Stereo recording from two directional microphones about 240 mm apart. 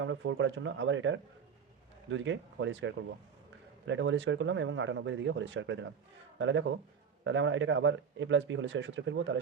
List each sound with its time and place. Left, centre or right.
0.0 s speech: right